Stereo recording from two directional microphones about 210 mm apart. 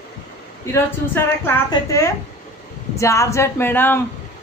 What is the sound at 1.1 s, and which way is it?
A woman's voice, 15° left (ahead or behind).